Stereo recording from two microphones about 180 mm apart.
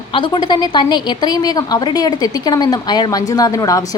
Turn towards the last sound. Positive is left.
turn(degrees=20)  # may be behind; listen again after turning